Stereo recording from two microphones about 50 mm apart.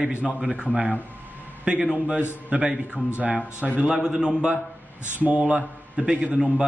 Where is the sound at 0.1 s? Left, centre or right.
Right.